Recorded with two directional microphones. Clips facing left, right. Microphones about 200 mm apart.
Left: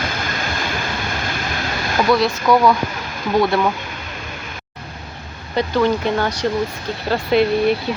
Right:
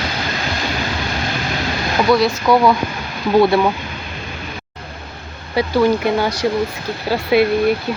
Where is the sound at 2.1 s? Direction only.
5° right (ahead or behind).